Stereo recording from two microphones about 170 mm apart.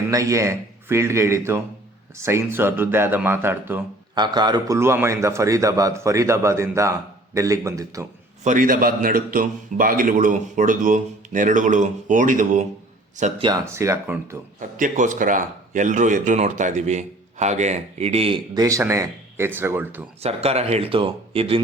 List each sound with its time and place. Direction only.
0.1 s a man's voice: 20° right (ahead or behind)
4.1 s a man's voice: 25° right (ahead or behind)
8.4 s a man's voice: 55° right (ahead or behind)
13.4 s a man's voice: 20° right (ahead or behind)
14.8 s a man's voice: 50° right (ahead or behind)
18.5 s a man's voice: 20° right (ahead or behind)
20.2 s speech: 35° right (ahead or behind)